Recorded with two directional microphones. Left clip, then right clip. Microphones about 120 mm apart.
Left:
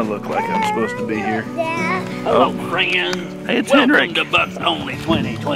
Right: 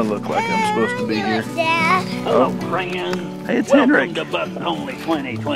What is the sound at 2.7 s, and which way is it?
Speech, 40° left (ahead or behind).